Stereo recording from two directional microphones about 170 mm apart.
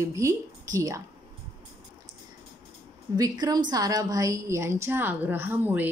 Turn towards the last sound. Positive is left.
turn(degrees=-10)  # may be behind; listen again after turning